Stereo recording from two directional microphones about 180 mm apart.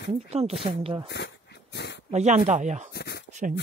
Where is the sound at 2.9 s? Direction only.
65° left (ahead or behind).